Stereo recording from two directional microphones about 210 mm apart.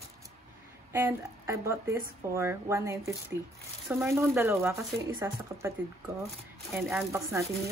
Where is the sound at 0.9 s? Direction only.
10° right (ahead or behind).